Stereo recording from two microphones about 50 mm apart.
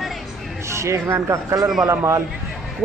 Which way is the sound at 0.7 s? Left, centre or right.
Right.